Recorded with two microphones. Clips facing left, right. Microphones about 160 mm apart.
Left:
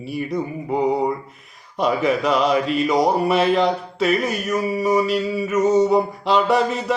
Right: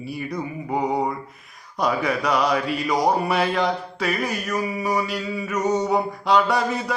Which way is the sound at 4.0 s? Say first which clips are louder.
Left 6 dB; 25° left (ahead or behind).